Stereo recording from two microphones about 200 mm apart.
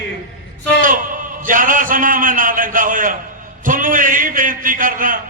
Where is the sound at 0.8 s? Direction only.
40° right (ahead or behind).